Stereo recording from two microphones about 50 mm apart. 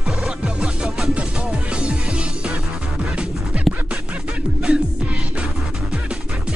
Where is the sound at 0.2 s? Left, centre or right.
Centre.